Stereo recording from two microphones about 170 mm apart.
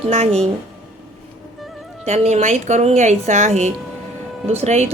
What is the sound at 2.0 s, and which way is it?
A woman's voice, 40° right (ahead or behind).